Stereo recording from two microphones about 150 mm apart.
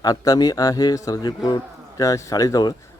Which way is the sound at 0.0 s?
25° left (ahead or behind).